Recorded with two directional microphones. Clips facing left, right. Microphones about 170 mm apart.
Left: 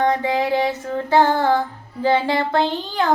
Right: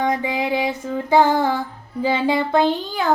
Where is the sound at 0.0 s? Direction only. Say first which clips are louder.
Left 2 dB; 15° right (ahead or behind).